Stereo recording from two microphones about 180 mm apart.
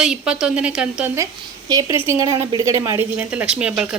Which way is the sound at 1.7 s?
25° right (ahead or behind).